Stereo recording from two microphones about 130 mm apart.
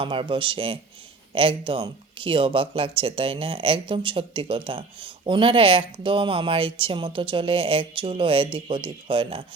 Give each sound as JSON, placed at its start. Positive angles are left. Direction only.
{"t": 0.0, "sound": "speech", "side_deg": -40}